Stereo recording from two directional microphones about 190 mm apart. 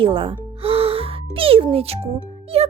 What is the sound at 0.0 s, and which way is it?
Music, 30° right (ahead or behind).